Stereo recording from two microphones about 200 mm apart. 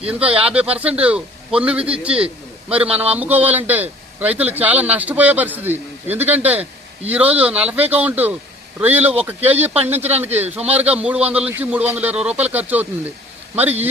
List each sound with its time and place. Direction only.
0.1 s a man's voice: 5° right (ahead or behind)
2.2 s a sound: 5° right (ahead or behind)
2.9 s a man's voice: 10° right (ahead or behind)